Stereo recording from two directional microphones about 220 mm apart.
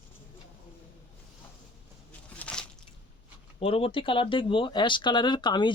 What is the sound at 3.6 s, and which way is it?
Speech, 25° left (ahead or behind).